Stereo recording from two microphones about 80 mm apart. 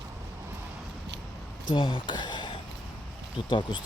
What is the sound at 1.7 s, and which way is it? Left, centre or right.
Speech, left.